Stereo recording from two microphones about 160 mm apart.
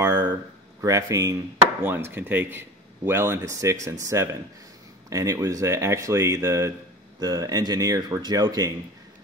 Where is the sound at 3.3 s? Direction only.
20° right (ahead or behind).